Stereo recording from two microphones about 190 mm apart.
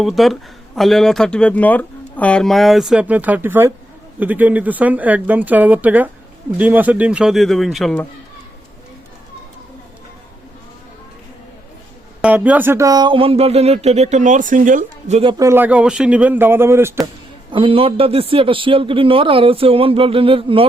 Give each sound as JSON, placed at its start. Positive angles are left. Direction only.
{"t": 0.0, "sound": "speech", "side_deg": 0}
{"t": 12.2, "sound": "speech", "side_deg": -5}
{"t": 15.4, "sound": "speech", "side_deg": -10}
{"t": 17.5, "sound": "a man's voice", "side_deg": -25}